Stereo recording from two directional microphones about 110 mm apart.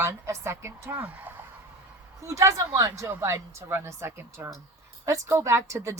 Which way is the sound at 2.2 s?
30° right (ahead or behind).